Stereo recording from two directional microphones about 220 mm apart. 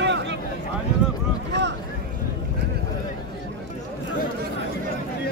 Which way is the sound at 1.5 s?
50° right (ahead or behind).